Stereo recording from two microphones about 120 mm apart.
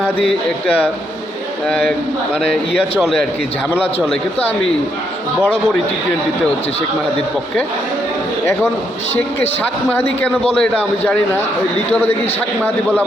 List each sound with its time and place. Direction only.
2.3 s a man's voice: 10° left (ahead or behind)
9.9 s a man's voice: 15° left (ahead or behind)